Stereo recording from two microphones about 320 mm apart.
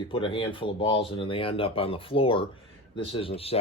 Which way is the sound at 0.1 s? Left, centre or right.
Centre.